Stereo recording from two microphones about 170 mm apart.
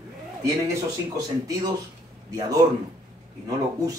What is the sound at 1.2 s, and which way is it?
Speech, 20° right (ahead or behind).